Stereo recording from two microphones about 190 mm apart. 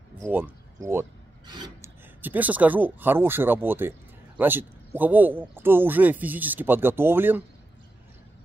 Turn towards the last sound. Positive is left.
turn(degrees=-10)  # may be behind; listen again after turning